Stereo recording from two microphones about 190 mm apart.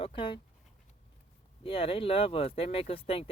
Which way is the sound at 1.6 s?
30° left (ahead or behind).